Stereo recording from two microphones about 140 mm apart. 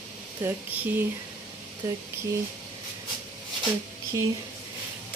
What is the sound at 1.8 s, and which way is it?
Speech, 20° right (ahead or behind).